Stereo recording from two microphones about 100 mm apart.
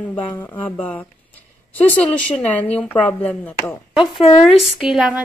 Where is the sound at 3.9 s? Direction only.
60° left (ahead or behind).